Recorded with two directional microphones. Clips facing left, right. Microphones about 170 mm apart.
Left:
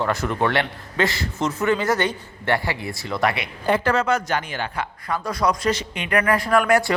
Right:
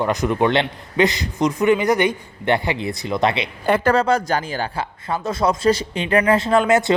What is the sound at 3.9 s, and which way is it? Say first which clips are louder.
Speech: right 3 dB; 35° right (ahead or behind).